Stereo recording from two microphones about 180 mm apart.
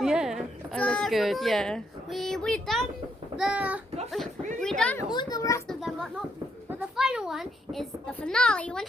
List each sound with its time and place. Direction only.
0.0 s a child's voice: 5° right (ahead or behind)
4.6 s a sound: 5° left (ahead or behind)
5.0 s a child's voice: 25° left (ahead or behind)
5.6 s music: centre (ahead or behind)
6.9 s a child's voice: 5° right (ahead or behind)